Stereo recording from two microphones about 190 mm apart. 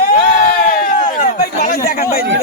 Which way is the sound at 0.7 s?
45° left (ahead or behind).